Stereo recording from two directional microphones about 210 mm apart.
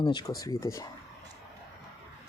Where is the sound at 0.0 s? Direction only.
20° left (ahead or behind).